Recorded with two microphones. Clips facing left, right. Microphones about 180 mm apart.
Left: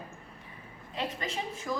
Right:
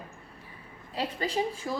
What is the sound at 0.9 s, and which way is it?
Speech, 35° right (ahead or behind).